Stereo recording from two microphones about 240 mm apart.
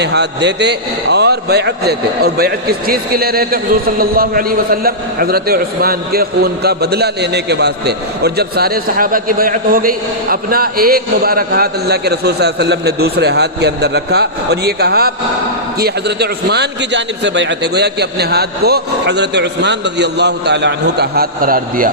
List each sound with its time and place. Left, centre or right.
0.0 s a man's voice: right